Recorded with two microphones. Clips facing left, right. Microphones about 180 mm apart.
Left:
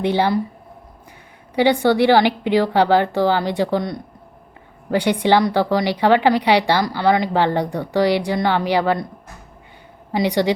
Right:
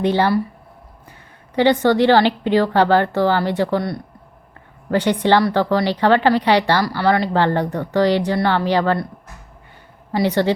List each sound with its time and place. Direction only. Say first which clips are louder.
0.0 s speech: right 1 dB; 15° left (ahead or behind)
1.5 s speech: right 1 dB; 10° left (ahead or behind)
10.1 s a woman's voice: right 1 dB; 15° left (ahead or behind)